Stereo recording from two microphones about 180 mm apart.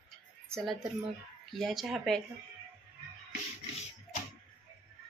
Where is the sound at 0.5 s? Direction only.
Centre (ahead or behind).